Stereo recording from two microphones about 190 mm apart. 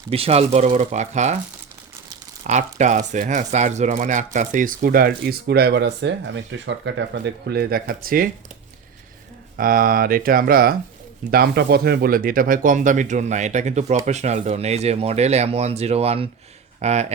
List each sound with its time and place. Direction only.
0.1 s speech: 30° right (ahead or behind)
2.4 s speech: 40° right (ahead or behind); by 6.9 s 70° right (ahead or behind)
7.4 s speech: 60° right (ahead or behind)
9.6 s speech: 50° right (ahead or behind)